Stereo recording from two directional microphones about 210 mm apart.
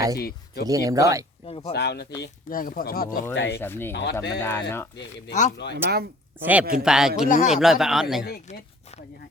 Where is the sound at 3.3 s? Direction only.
55° left (ahead or behind).